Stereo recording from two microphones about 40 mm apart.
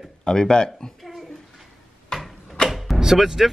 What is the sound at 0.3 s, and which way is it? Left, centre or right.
Speech, centre.